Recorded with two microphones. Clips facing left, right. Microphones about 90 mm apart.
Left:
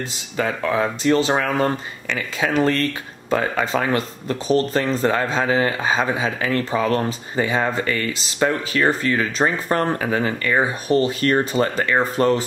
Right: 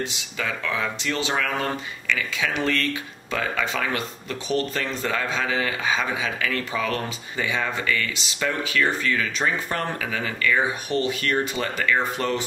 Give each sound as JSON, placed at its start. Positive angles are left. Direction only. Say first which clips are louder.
{"t": 0.1, "sound": "speech", "louder": "left 6 dB", "side_deg": 40}